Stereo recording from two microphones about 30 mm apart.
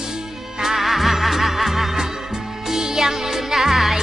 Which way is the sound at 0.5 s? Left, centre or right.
Centre.